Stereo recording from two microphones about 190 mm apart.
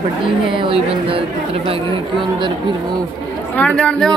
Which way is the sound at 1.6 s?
25° right (ahead or behind).